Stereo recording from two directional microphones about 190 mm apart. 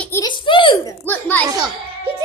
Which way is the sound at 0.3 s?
25° left (ahead or behind).